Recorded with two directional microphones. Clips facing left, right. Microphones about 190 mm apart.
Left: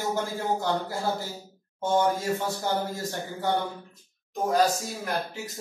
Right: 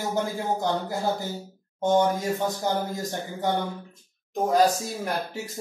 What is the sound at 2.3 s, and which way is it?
Speech, 15° right (ahead or behind).